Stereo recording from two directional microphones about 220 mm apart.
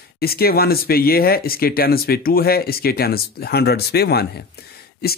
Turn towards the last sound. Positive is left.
turn(degrees=45)  # may be behind; listen again after turning